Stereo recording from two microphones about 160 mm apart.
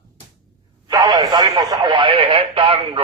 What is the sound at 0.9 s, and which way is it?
Speech, 25° right (ahead or behind).